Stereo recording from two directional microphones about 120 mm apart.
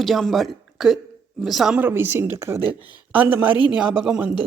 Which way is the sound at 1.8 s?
15° right (ahead or behind).